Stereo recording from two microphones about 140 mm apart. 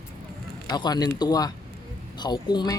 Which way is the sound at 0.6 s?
30° left (ahead or behind).